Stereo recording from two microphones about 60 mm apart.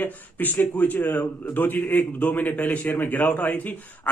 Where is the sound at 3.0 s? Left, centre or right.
Left.